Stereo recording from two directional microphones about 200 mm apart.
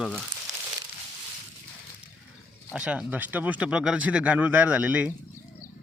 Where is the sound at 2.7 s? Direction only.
5° right (ahead or behind).